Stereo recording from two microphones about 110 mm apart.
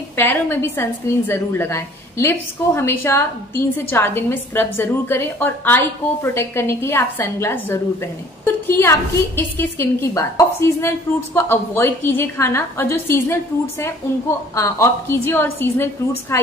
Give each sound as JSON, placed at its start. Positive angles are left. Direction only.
{"t": 0.1, "sound": "a woman's voice", "side_deg": 20}